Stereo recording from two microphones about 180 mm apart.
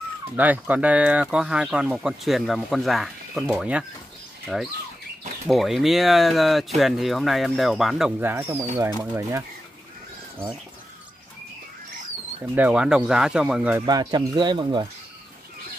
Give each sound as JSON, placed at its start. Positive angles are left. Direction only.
{"t": 0.4, "sound": "speech", "side_deg": -10}
{"t": 8.2, "sound": "speech", "side_deg": -10}
{"t": 12.5, "sound": "speech", "side_deg": -5}
{"t": 13.8, "sound": "speech", "side_deg": -25}